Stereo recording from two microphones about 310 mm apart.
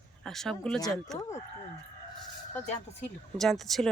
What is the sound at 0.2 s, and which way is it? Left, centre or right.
Speech, centre.